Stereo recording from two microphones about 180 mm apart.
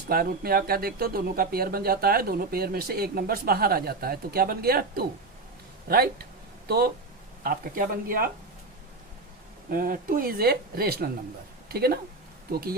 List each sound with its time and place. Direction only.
0.1 s speech: 55° right (ahead or behind)
9.6 s speech: 50° right (ahead or behind)